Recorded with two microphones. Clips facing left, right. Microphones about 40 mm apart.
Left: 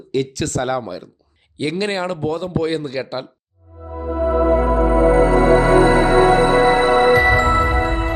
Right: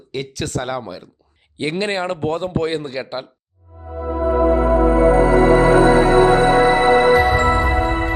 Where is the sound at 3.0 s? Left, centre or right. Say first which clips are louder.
Left 1 dB; centre.